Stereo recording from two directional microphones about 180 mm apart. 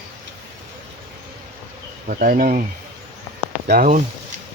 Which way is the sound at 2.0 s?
50° right (ahead or behind).